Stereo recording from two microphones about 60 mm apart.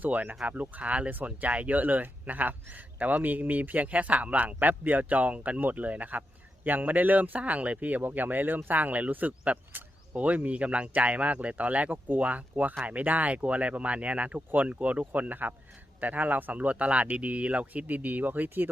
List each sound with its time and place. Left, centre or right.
0.0 s speech: right